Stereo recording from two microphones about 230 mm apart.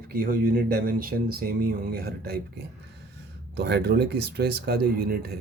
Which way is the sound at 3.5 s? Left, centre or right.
Right.